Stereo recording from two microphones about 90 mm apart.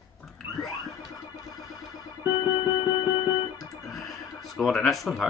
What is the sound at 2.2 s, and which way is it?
Music, 55° left (ahead or behind).